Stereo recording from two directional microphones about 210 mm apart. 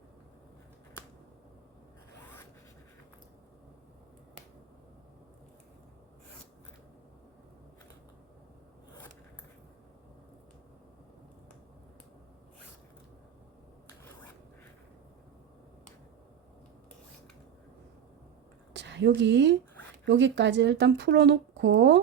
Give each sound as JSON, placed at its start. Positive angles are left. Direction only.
{"t": 18.7, "sound": "speech", "side_deg": -55}